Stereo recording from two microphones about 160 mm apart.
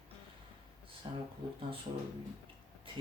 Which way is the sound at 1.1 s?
25° right (ahead or behind).